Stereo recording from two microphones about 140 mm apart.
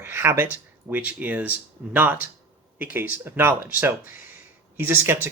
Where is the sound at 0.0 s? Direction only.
15° right (ahead or behind).